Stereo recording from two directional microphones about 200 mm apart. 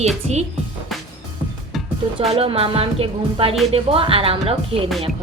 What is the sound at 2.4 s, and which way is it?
A woman's voice, 25° right (ahead or behind).